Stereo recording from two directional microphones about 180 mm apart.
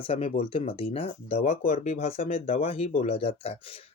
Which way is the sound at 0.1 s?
35° left (ahead or behind).